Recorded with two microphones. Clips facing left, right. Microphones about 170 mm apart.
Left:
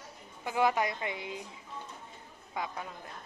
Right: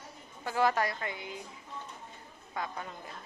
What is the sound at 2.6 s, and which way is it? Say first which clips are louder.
Speech: even; 5° left (ahead or behind).